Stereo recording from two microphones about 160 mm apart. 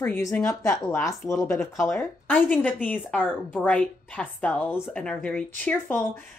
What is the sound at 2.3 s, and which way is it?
Speech, 10° left (ahead or behind).